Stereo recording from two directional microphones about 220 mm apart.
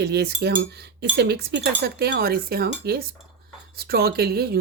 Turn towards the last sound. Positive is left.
turn(degrees=-45)  # may be behind; listen again after turning